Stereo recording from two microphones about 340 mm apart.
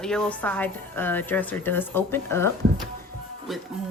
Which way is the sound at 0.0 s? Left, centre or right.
Centre.